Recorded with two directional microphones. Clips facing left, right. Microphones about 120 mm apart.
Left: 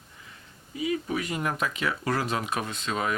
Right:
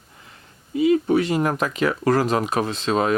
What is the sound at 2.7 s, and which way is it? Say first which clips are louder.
Speech: right 9 dB; 90° right.